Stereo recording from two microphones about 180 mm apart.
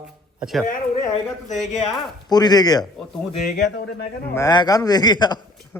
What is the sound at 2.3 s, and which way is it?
Speech, 20° left (ahead or behind).